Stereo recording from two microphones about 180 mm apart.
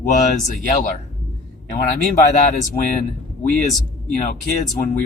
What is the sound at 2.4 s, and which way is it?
Speech, 45° left (ahead or behind).